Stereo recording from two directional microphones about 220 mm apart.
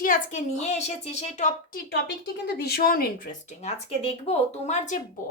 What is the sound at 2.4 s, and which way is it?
Speech, 45° left (ahead or behind).